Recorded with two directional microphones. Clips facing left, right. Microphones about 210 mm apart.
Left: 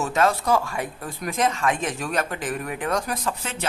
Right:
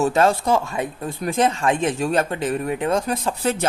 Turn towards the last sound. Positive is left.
turn(degrees=-40)  # may be behind; listen again after turning